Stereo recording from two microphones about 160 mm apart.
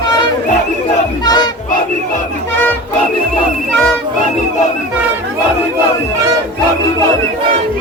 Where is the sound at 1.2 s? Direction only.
25° left (ahead or behind).